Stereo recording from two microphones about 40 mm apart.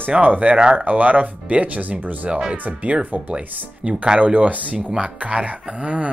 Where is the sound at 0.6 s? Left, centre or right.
Right.